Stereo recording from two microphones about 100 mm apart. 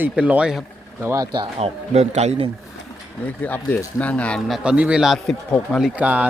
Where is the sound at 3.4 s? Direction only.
15° left (ahead or behind).